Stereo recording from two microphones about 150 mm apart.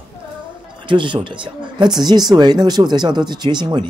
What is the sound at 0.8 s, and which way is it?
Speech, 35° right (ahead or behind).